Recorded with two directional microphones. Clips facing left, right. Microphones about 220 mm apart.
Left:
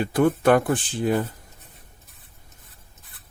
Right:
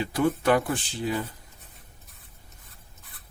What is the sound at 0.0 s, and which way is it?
Speech, 55° left (ahead or behind).